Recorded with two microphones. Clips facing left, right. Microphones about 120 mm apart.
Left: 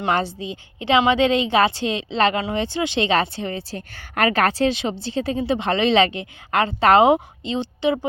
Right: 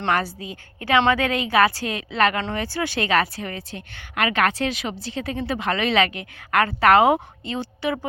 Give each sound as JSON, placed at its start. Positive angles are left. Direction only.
{"t": 0.1, "sound": "a woman's voice", "side_deg": 25}